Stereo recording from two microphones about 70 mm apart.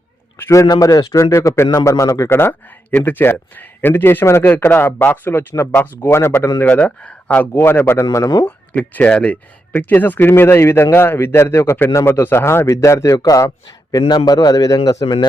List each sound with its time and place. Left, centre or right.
0.7 s a man's voice: left
2.3 s a man's voice: left
6.6 s a man's voice: left
13.1 s a man's voice: left
13.7 s a man's voice: left